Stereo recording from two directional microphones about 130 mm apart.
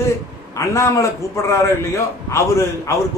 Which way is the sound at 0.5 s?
25° left (ahead or behind).